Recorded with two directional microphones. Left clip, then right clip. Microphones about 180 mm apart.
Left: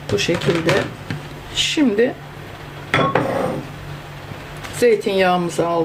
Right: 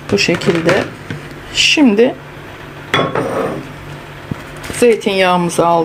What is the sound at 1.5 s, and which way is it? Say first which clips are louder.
Speech: right 7 dB; 25° right (ahead or behind).